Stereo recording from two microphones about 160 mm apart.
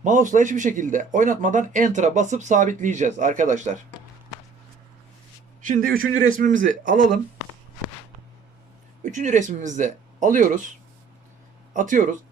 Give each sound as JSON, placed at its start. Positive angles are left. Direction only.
{"t": 0.0, "sound": "speech", "side_deg": -55}
{"t": 5.6, "sound": "speech", "side_deg": -60}
{"t": 9.0, "sound": "speech", "side_deg": -50}